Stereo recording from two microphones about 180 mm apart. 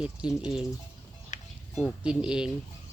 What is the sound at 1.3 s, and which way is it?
Music, 40° left (ahead or behind).